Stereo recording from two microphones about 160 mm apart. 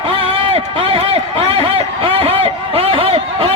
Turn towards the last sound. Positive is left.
turn(degrees=-35)  # may be behind; listen again after turning